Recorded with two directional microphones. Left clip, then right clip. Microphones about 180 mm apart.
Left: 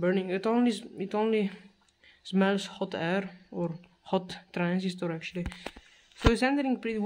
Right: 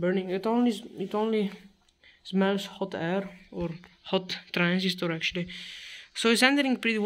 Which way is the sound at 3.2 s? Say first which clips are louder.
Even; 20° left (ahead or behind).